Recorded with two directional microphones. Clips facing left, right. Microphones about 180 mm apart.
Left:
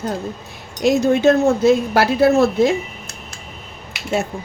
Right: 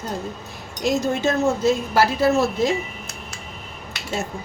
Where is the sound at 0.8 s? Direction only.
60° left (ahead or behind).